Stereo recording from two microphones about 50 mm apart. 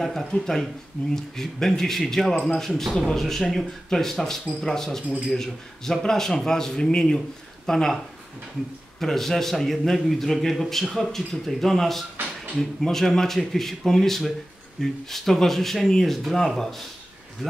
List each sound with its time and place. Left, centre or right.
0.0 s a man's voice: centre
9.0 s a man's voice: centre